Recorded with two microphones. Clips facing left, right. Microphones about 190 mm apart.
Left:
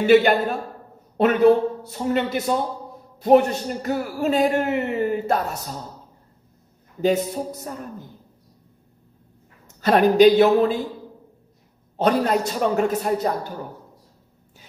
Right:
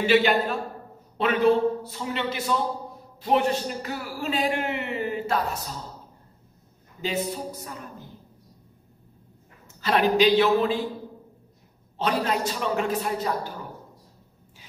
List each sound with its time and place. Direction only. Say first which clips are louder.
0.0 s a man's voice: left 5 dB; 50° left (ahead or behind)
2.0 s a man's voice: left 7 dB; 45° left (ahead or behind)
7.0 s a man's voice: left 8 dB; 45° left (ahead or behind)
9.8 s a man's voice: left 6 dB; 45° left (ahead or behind)
12.0 s a man's voice: left 6 dB; 45° left (ahead or behind)